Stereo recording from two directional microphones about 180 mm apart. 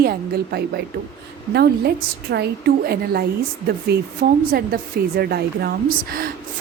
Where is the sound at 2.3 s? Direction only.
65° right (ahead or behind).